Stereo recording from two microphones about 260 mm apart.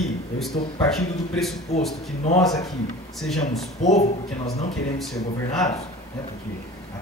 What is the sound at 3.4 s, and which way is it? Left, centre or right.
Speech, left.